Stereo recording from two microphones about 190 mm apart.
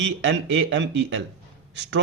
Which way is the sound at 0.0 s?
75° right (ahead or behind).